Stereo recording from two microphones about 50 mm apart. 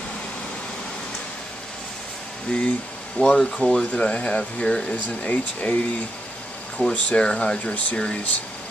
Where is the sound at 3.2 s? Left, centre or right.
Centre.